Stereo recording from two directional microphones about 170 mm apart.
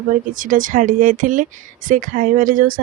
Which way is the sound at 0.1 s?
50° right (ahead or behind).